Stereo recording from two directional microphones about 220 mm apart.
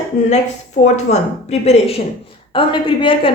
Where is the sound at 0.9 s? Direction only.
30° left (ahead or behind).